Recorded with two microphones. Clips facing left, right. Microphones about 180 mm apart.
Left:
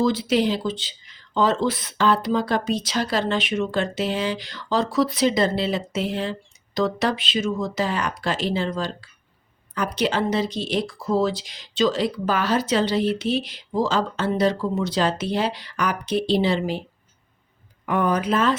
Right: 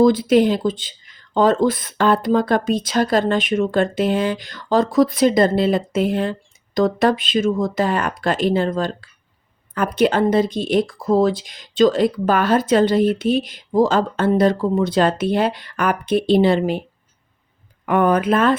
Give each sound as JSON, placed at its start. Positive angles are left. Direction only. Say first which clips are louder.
{"t": 0.0, "sound": "speech", "louder": "right 7 dB", "side_deg": -50}
{"t": 17.8, "sound": "speech", "louder": "right 5 dB", "side_deg": -60}